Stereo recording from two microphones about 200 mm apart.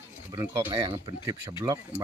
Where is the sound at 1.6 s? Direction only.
15° right (ahead or behind).